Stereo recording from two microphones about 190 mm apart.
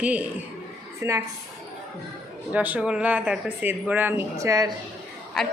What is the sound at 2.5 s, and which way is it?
Speech, 10° right (ahead or behind).